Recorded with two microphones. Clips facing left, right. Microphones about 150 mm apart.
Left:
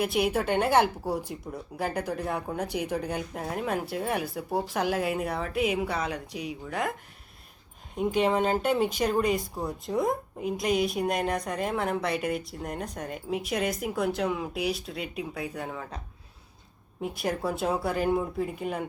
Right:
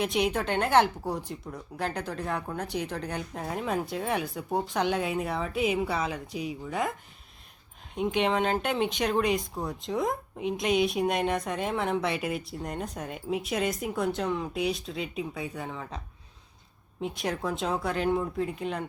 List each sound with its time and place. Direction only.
0.0 s speech: 5° left (ahead or behind)
8.2 s speech: 5° left (ahead or behind)
17.0 s speech: 5° left (ahead or behind)